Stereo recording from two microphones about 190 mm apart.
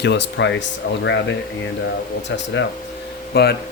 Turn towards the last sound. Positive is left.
turn(degrees=55)  # may be behind; listen again after turning